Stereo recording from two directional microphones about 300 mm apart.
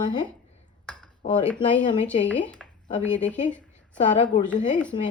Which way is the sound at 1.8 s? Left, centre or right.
Left.